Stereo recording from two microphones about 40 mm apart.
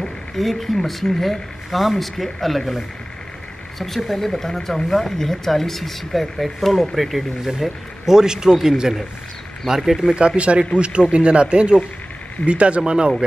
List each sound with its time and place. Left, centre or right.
0.0 s speech: centre
3.8 s speech: centre
10.1 s speech: right